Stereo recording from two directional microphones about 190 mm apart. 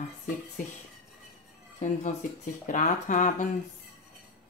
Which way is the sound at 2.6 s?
40° left (ahead or behind).